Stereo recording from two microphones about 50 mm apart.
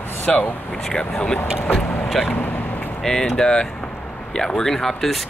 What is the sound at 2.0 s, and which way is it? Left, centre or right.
Speech, centre.